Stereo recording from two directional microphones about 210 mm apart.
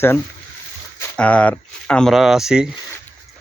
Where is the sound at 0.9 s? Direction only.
5° left (ahead or behind).